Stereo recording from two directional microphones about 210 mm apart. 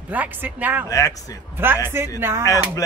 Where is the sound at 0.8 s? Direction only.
15° left (ahead or behind).